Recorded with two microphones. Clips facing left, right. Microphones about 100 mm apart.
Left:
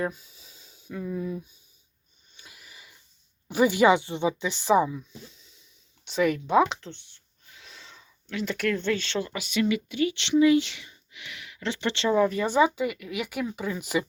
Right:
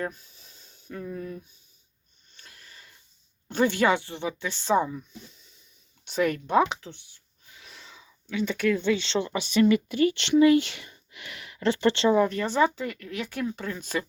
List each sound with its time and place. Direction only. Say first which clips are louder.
0.0 s speech: left 3 dB; 10° left (ahead or behind)
2.3 s a sound: left 1 dB; 10° left (ahead or behind)
3.5 s speech: left 3 dB; 10° left (ahead or behind)
4.8 s speech: left 2 dB; centre (ahead or behind)
9.0 s speech: right 3 dB; 25° right (ahead or behind); by 12.0 s 40° right (ahead or behind)
12.1 s speech: left 1 dB; centre (ahead or behind)